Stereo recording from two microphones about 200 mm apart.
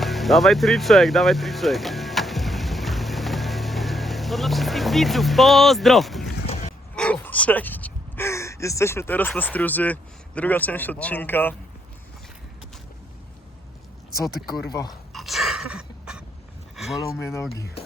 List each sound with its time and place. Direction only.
0.0 s music: centre (ahead or behind)
6.9 s speech: 5° left (ahead or behind)
14.3 s speech: centre (ahead or behind)
14.5 s speech: 20° left (ahead or behind)
15.1 s gasp: centre (ahead or behind)
16.7 s a sound: centre (ahead or behind)
17.2 s speech: 15° left (ahead or behind)